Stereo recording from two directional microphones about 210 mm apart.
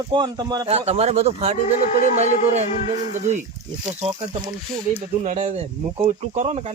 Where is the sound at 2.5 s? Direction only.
30° right (ahead or behind).